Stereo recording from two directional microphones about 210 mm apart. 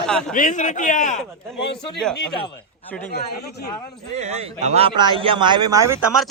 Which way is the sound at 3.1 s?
50° left (ahead or behind).